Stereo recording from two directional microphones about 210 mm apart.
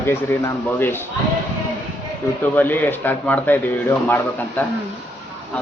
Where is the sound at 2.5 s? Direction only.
10° left (ahead or behind).